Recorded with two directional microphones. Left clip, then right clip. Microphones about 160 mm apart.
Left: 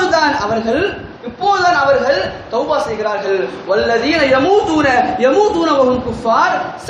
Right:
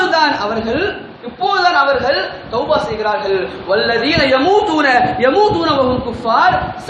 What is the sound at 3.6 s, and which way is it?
A man's voice, 15° right (ahead or behind).